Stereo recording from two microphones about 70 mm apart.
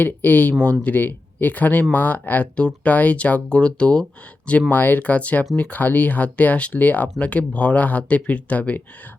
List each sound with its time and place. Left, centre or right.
0.0 s speech: left